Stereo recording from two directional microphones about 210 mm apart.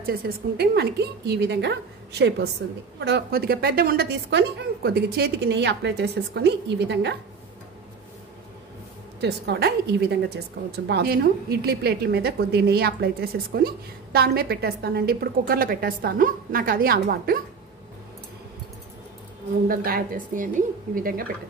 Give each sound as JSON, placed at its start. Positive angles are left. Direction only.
{"t": 0.0, "sound": "a woman's voice", "side_deg": -45}
{"t": 9.2, "sound": "a woman's voice", "side_deg": -50}
{"t": 19.7, "sound": "a woman's voice", "side_deg": -45}